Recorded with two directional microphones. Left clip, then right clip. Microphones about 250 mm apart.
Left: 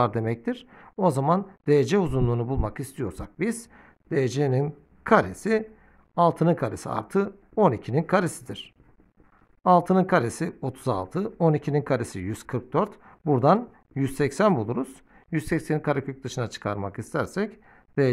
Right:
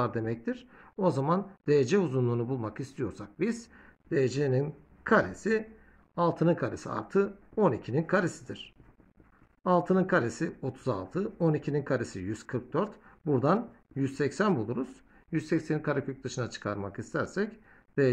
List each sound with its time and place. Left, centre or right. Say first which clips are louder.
0.0 s speech: left 6 dB; left